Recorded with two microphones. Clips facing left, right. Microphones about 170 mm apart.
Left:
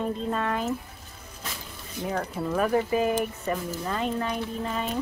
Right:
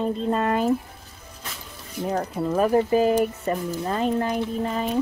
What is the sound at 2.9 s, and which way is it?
Speech, 35° right (ahead or behind).